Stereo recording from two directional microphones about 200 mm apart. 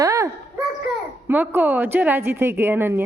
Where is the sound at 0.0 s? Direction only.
15° right (ahead or behind).